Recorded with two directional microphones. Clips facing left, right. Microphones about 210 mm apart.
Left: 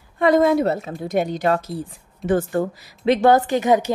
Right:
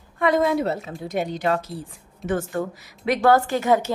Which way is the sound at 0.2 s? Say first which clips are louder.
Left 4 dB; 45° left (ahead or behind).